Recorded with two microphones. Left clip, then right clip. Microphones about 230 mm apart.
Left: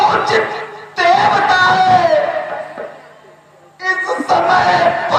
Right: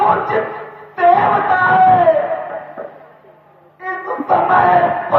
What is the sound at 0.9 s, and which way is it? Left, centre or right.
Music, left.